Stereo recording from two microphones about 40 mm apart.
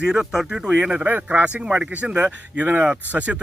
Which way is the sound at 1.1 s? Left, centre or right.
Right.